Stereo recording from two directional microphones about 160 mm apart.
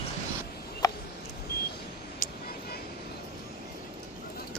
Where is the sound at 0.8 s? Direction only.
25° left (ahead or behind).